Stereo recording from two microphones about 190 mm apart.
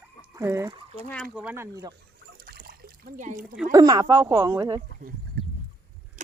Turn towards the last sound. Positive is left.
turn(degrees=-40)  # may be behind; listen again after turning